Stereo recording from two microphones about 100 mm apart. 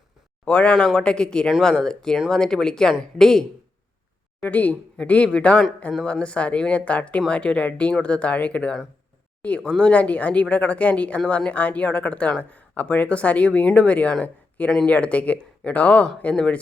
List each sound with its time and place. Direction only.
0.4 s speech: 10° left (ahead or behind)
4.4 s speech: 15° left (ahead or behind)